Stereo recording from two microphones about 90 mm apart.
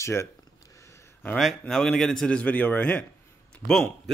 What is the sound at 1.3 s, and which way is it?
A man's voice, centre (ahead or behind).